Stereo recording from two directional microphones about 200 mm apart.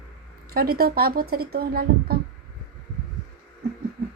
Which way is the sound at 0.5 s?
50° right (ahead or behind).